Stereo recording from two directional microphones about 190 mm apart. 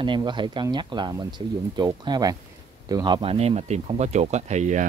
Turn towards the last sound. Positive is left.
turn(degrees=-40)  # may be behind; listen again after turning